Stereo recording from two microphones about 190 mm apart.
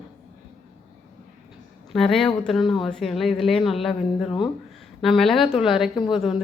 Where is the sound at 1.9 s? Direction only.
Centre (ahead or behind).